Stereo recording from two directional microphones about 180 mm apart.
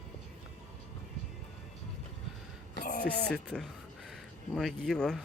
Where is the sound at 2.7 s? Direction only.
55° left (ahead or behind).